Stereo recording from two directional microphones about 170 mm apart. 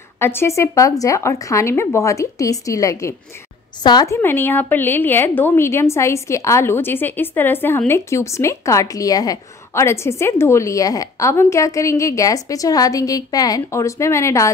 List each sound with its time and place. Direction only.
0.2 s a woman's voice: 15° left (ahead or behind)